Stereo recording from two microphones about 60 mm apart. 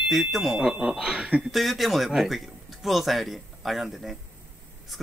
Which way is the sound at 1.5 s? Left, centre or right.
Centre.